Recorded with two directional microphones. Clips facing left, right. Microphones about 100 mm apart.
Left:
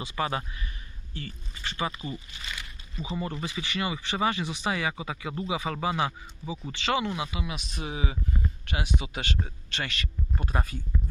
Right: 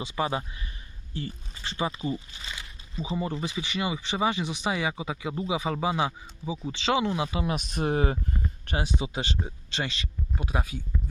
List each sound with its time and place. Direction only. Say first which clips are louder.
0.0 s speech: right 1 dB; 20° right (ahead or behind); by 8.2 s 50° right (ahead or behind)
8.6 s speech: right 4 dB; 35° right (ahead or behind)
10.3 s speech: right 1 dB; 5° right (ahead or behind)